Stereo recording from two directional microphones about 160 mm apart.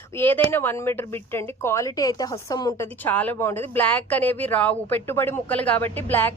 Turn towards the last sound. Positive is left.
turn(degrees=10)  # may be behind; listen again after turning